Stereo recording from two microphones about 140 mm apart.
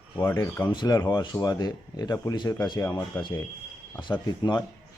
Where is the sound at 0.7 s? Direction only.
30° left (ahead or behind).